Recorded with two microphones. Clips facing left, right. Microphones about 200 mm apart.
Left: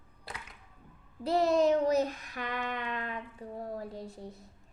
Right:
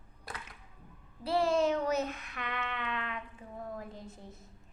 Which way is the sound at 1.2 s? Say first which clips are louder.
Left 3 dB; 40° left (ahead or behind).